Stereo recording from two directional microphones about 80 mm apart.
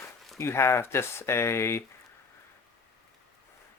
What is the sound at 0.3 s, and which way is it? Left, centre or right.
Speech, left.